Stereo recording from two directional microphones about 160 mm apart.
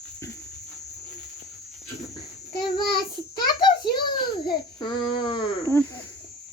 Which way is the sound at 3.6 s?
25° left (ahead or behind).